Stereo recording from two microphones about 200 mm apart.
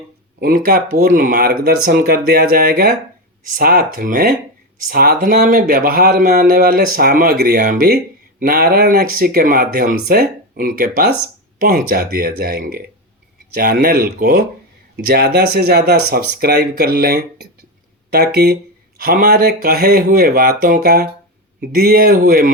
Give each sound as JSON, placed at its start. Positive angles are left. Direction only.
{"t": 0.3, "sound": "speech", "side_deg": -45}